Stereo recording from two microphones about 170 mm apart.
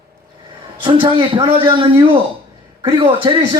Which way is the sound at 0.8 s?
30° right (ahead or behind).